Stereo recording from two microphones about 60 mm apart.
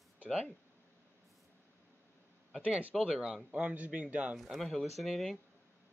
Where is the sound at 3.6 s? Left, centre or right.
Right.